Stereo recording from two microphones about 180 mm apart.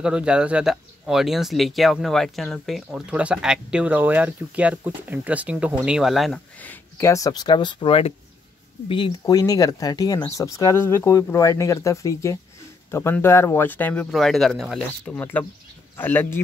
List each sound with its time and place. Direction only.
0.0 s speech: 5° right (ahead or behind)
15.1 s speech: 10° left (ahead or behind)